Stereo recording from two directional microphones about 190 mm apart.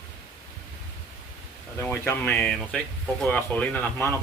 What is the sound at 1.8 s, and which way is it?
Speech, 10° left (ahead or behind).